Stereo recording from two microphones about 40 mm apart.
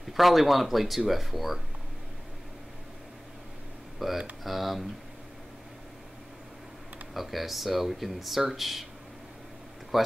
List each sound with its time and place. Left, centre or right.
0.0 s speech: centre
4.0 s speech: centre
7.2 s speech: centre
9.9 s speech: centre